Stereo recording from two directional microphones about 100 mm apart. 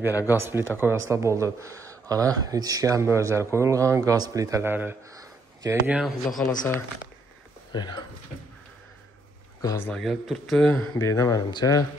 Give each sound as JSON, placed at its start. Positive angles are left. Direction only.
{"t": 0.3, "sound": "speech", "side_deg": -25}
{"t": 4.6, "sound": "a man's voice", "side_deg": -20}
{"t": 5.1, "sound": "a sound", "side_deg": -35}
{"t": 5.9, "sound": "speech", "side_deg": 0}
{"t": 7.7, "sound": "speech", "side_deg": 45}
{"t": 9.6, "sound": "speech", "side_deg": 40}
{"t": 9.9, "sound": "speech", "side_deg": 0}
{"t": 11.0, "sound": "speech", "side_deg": 30}